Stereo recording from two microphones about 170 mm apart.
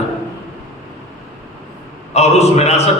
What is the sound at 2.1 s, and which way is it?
Speech, 40° left (ahead or behind).